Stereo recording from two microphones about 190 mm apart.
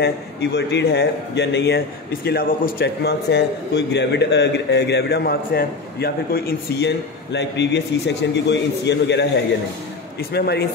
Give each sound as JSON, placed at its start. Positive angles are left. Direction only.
{"t": 0.0, "sound": "a man's voice", "side_deg": 65}
{"t": 2.2, "sound": "a man's voice", "side_deg": 50}
{"t": 7.3, "sound": "a man's voice", "side_deg": 65}
{"t": 10.3, "sound": "a man's voice", "side_deg": 60}